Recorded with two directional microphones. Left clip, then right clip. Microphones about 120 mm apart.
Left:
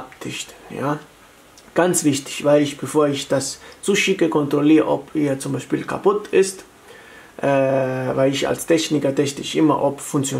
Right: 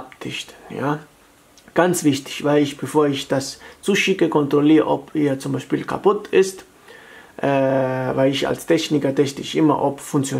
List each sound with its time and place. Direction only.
0.2 s speech: 35° right (ahead or behind)